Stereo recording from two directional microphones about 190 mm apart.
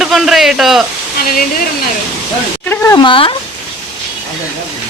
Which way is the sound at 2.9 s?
25° left (ahead or behind).